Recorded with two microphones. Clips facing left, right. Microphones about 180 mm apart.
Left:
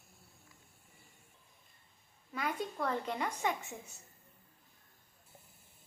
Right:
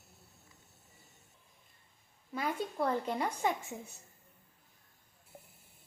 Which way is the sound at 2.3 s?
30° right (ahead or behind).